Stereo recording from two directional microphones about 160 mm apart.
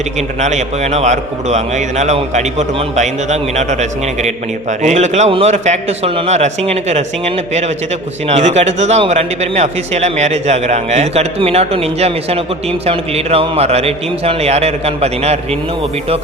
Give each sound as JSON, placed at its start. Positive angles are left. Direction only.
{"t": 0.4, "sound": "a man's voice", "side_deg": -45}